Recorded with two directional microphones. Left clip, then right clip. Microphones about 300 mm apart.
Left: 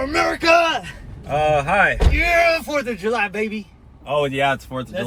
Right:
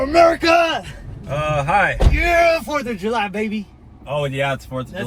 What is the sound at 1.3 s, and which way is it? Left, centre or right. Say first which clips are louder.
Speech: left 1 dB; centre.